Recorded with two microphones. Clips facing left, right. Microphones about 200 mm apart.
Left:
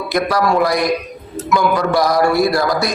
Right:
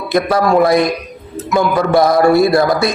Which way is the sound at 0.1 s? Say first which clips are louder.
Right 4 dB; 25° right (ahead or behind).